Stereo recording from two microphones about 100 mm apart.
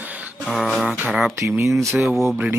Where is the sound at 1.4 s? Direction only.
30° right (ahead or behind).